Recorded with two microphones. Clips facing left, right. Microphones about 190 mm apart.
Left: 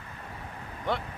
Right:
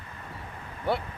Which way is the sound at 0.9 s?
5° right (ahead or behind).